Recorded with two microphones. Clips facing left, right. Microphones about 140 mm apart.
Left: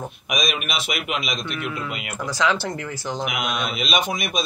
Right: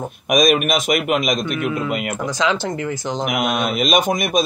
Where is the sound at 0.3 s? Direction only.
45° right (ahead or behind).